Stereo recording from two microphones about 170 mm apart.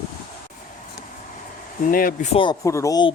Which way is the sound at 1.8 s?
55° left (ahead or behind).